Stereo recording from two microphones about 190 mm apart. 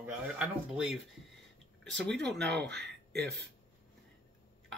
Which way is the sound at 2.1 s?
65° right (ahead or behind).